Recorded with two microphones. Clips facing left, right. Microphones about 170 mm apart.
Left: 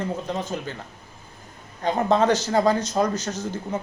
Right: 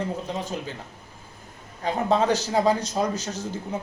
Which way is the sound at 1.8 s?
5° right (ahead or behind).